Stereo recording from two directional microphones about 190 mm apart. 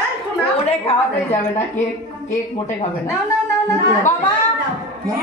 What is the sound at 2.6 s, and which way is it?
Speech, 10° left (ahead or behind).